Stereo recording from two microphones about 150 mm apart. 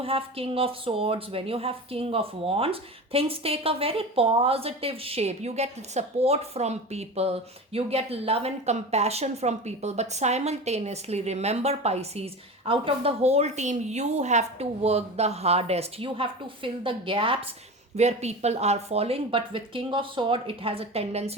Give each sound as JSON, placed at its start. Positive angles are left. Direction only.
{"t": 0.0, "sound": "speech", "side_deg": -40}
{"t": 17.9, "sound": "speech", "side_deg": -45}